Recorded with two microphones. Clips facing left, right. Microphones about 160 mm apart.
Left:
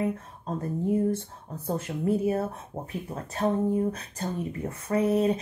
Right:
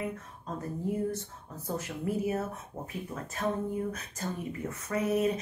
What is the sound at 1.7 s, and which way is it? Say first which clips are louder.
Speech: left 6 dB; 30° left (ahead or behind).